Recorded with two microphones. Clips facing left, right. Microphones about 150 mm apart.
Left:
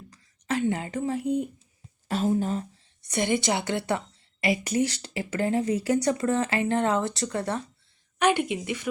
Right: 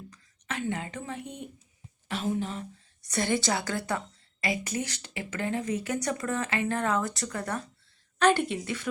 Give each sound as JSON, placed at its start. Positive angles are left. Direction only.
{"t": 0.1, "sound": "speech", "side_deg": 35}
{"t": 3.0, "sound": "a woman's voice", "side_deg": 20}
{"t": 8.2, "sound": "a woman's voice", "side_deg": 15}